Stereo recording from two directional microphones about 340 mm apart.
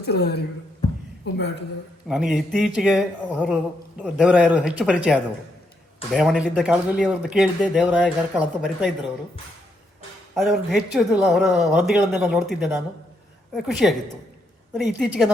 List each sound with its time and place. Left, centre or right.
0.0 s speech: left
2.0 s speech: centre
10.3 s speech: centre